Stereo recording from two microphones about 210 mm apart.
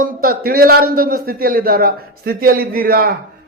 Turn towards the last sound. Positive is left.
turn(degrees=-45)  # may be behind; listen again after turning